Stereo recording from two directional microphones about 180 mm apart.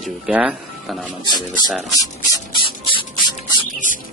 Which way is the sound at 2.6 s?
30° left (ahead or behind).